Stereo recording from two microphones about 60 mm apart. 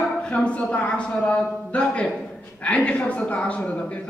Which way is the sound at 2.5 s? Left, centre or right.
Left.